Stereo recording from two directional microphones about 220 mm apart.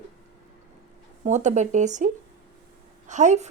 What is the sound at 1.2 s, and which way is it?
Speech, 30° right (ahead or behind).